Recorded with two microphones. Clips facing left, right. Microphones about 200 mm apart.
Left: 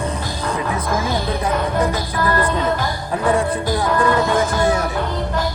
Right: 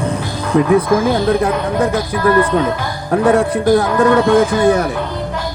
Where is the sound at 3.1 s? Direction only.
60° right (ahead or behind).